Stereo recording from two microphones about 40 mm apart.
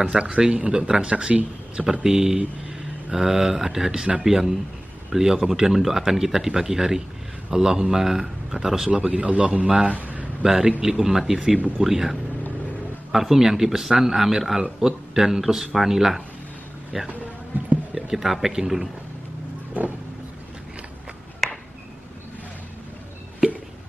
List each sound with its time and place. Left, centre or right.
0.4 s speech: right
1.9 s speech: centre; by 9.7 s right
9.8 s a sound: right
10.4 s speech: centre
11.3 s speech: right
11.8 s speech: centre
18.1 s speech: centre
21.4 s a sound: centre